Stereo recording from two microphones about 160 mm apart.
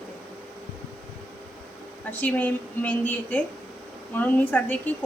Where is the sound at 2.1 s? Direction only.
10° left (ahead or behind).